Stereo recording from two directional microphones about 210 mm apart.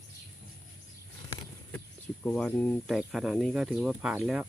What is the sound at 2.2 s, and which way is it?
Speech, 5° left (ahead or behind).